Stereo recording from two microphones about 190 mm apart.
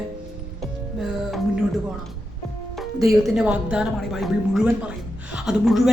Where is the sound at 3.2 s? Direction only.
5° right (ahead or behind).